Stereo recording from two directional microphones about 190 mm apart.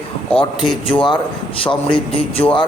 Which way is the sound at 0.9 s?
25° left (ahead or behind).